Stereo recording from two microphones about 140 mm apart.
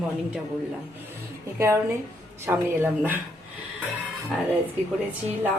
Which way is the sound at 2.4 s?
15° right (ahead or behind).